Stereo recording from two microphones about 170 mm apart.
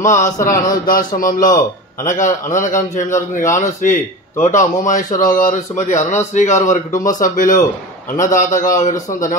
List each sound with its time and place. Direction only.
0.0 s a man's voice: 45° left (ahead or behind)
0.8 s a sound: 55° left (ahead or behind)
2.0 s a man's voice: 50° left (ahead or behind)
6.9 s speech: 20° left (ahead or behind)
7.2 s a man's voice: 50° left (ahead or behind)